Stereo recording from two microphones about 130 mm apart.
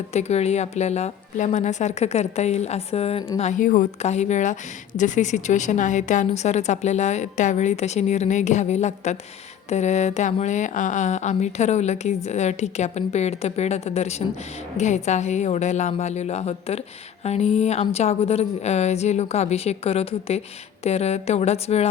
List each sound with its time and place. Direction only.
0.1 s speech: 55° left (ahead or behind)
3.4 s a woman's voice: 80° left; by 21.8 s 55° left (ahead or behind)